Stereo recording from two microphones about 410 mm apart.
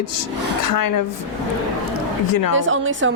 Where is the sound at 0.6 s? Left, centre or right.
Left.